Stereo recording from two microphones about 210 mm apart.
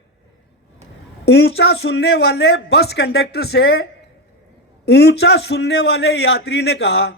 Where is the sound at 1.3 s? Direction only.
50° left (ahead or behind).